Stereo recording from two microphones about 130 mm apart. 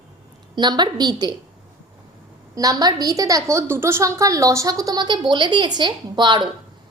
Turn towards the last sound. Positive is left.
turn(degrees=-35)  # may be behind; listen again after turning